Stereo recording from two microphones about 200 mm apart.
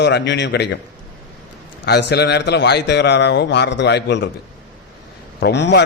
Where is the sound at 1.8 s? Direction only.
55° left (ahead or behind).